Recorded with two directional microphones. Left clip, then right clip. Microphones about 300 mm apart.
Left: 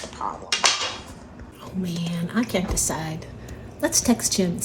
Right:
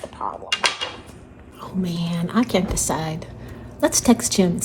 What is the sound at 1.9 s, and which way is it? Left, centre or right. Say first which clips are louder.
Speech: right 4 dB; centre.